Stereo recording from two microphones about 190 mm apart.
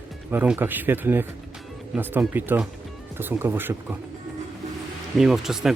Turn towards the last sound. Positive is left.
turn(degrees=0)  # may be behind; listen again after turning